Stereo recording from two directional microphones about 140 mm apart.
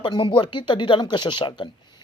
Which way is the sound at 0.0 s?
30° left (ahead or behind).